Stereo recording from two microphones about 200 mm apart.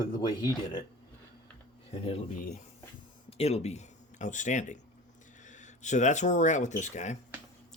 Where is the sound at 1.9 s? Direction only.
30° left (ahead or behind).